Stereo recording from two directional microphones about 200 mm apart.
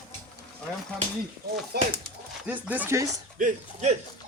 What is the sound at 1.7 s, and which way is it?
Speech, 50° right (ahead or behind).